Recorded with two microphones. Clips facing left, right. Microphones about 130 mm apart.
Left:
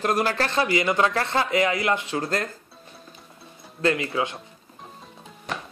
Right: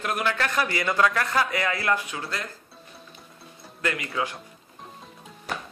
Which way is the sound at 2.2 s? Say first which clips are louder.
Left 7 dB; 45° left (ahead or behind).